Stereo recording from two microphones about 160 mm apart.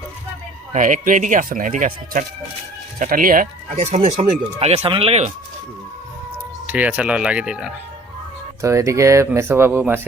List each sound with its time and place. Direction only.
0.7 s speech: 50° right (ahead or behind)
6.7 s speech: 10° right (ahead or behind)
8.6 s speech: 20° right (ahead or behind)